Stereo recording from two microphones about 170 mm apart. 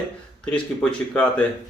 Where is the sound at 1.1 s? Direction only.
5° left (ahead or behind).